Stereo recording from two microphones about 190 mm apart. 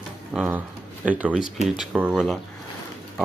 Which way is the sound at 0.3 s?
10° right (ahead or behind).